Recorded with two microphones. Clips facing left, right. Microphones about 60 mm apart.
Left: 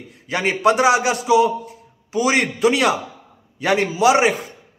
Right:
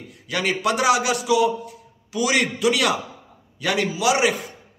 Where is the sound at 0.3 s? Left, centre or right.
Left.